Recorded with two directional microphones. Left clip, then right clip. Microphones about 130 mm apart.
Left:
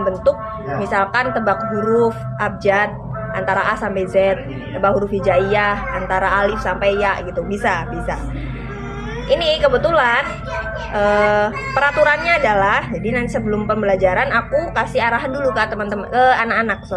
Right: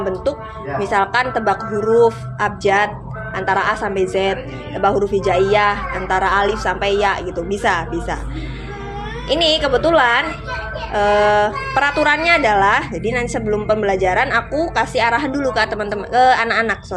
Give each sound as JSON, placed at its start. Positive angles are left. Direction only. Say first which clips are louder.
{"t": 0.8, "sound": "speech", "louder": "right 1 dB", "side_deg": -40}
{"t": 9.3, "sound": "speech", "louder": "left 1 dB", "side_deg": -45}